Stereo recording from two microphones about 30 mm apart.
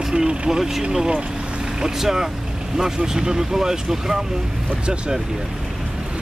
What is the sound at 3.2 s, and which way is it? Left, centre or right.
Speech, right.